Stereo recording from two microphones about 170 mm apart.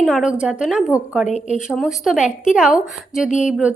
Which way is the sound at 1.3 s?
40° left (ahead or behind).